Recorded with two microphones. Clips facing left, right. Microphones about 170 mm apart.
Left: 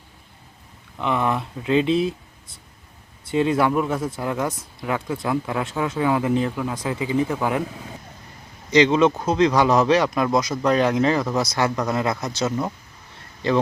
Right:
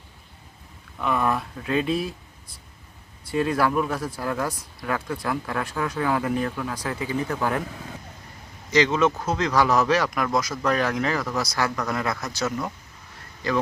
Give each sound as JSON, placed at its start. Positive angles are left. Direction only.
{"t": 1.0, "sound": "speech", "side_deg": 20}
{"t": 8.7, "sound": "speech", "side_deg": 20}